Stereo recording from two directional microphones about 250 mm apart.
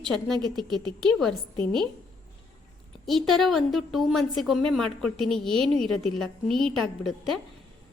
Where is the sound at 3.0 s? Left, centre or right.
Centre.